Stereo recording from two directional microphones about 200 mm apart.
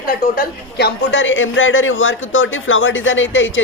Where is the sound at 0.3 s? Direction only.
55° left (ahead or behind).